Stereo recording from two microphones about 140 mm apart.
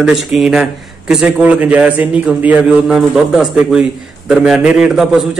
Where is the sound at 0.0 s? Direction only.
Centre (ahead or behind).